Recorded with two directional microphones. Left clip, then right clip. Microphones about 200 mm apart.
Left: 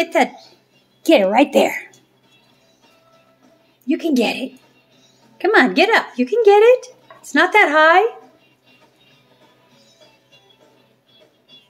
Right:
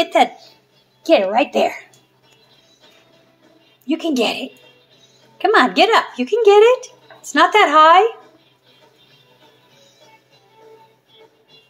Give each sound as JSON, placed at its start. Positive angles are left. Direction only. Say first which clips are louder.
{"t": 0.0, "sound": "speech", "louder": "right 2 dB", "side_deg": 20}
{"t": 1.0, "sound": "a woman's voice", "louder": "left 1 dB", "side_deg": 40}
{"t": 3.8, "sound": "speech", "louder": "even", "side_deg": 20}